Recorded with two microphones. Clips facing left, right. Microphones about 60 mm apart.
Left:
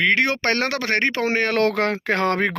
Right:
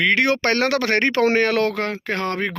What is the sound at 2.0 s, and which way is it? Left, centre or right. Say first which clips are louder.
Speech: left 3 dB; left.